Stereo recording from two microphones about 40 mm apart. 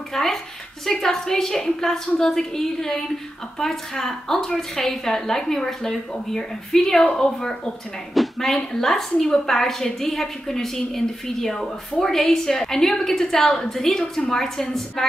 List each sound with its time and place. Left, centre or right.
0.1 s a woman's voice: centre